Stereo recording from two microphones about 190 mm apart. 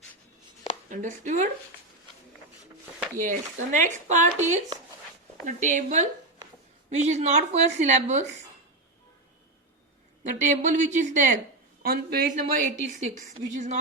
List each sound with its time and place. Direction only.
0.9 s speech: 40° right (ahead or behind)
3.2 s speech: 40° right (ahead or behind)
10.2 s speech: 40° right (ahead or behind)
11.8 s a woman's voice: 55° right (ahead or behind)